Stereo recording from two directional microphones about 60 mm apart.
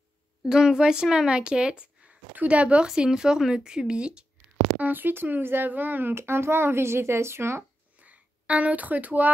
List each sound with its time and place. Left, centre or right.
0.5 s speech: centre
2.9 s speech: centre
4.7 s a child's voice: right
8.0 s a sound: right